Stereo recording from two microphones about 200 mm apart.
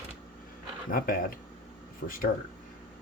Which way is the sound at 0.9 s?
45° left (ahead or behind).